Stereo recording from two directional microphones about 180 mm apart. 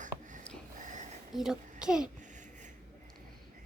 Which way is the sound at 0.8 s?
45° right (ahead or behind).